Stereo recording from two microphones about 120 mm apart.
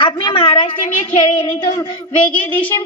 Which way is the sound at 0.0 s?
40° left (ahead or behind).